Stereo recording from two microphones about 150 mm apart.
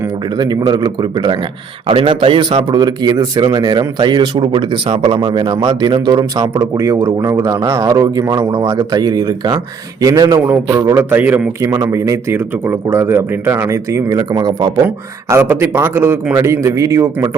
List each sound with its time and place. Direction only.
0.3 s a man's voice: 30° right (ahead or behind)
14.8 s a man's voice: 15° right (ahead or behind)